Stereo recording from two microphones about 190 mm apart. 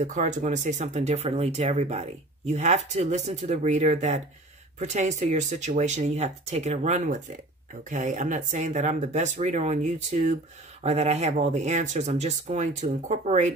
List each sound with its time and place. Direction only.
0.0 s speech: 40° right (ahead or behind)